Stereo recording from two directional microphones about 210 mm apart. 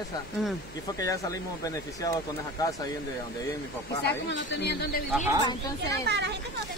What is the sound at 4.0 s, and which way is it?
Speech, 50° left (ahead or behind).